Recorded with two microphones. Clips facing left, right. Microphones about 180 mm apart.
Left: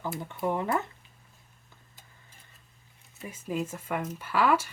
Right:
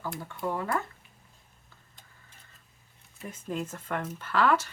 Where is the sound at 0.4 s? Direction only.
20° left (ahead or behind).